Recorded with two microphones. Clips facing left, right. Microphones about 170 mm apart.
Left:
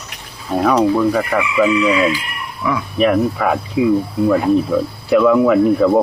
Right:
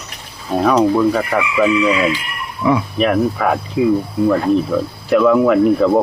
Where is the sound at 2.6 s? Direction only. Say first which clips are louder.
Right 5 dB; 25° right (ahead or behind).